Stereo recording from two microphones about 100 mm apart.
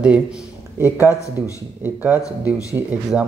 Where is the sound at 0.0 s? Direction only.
10° right (ahead or behind).